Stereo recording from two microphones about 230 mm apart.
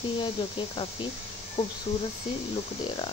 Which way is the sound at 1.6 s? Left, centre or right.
Left.